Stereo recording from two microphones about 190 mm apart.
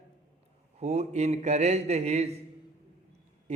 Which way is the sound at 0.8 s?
35° right (ahead or behind).